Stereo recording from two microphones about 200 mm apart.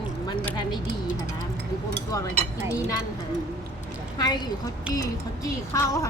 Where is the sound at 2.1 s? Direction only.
15° left (ahead or behind).